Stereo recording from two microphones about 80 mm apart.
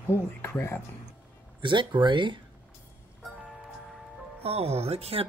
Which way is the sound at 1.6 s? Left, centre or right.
Right.